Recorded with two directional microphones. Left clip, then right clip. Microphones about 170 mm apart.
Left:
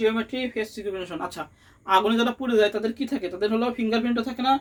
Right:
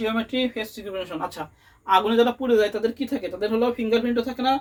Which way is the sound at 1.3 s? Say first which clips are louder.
Right 1 dB; 35° left (ahead or behind).